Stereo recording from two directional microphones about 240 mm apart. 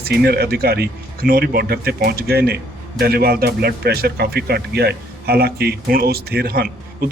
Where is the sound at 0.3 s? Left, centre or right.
Right.